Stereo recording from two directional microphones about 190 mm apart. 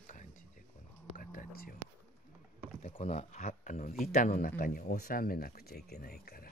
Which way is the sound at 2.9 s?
35° left (ahead or behind).